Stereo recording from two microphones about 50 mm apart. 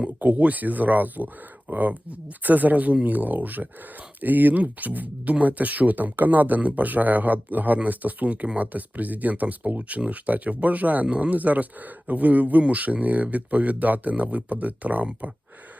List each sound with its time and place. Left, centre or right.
0.2 s speech: right